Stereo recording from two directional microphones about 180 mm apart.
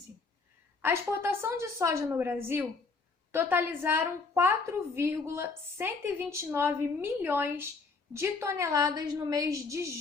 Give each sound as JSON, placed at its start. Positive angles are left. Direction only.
{"t": 0.8, "sound": "a woman's voice", "side_deg": -15}